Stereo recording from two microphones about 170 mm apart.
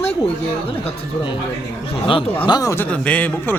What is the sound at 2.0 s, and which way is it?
Speech, 30° left (ahead or behind).